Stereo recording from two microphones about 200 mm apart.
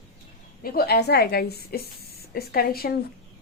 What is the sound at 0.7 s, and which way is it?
A woman's voice, 50° left (ahead or behind).